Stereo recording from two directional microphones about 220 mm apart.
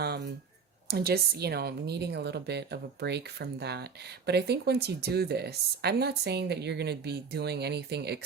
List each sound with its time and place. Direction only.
0.9 s speech: 45° right (ahead or behind)